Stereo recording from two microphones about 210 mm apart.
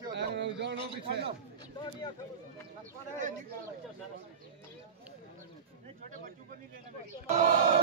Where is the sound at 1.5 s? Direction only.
20° left (ahead or behind).